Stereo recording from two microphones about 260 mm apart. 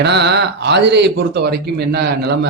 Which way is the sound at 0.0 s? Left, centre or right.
Right.